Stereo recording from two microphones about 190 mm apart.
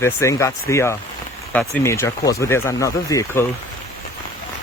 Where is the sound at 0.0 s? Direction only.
15° left (ahead or behind).